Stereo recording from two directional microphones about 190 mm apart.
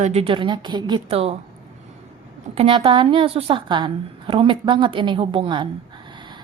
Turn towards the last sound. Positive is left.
turn(degrees=-25)  # may be behind; listen again after turning